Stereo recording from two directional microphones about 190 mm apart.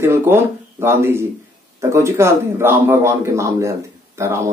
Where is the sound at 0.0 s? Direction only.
15° right (ahead or behind).